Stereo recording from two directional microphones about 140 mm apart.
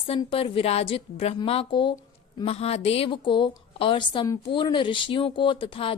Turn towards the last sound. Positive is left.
turn(degrees=40)  # may be behind; listen again after turning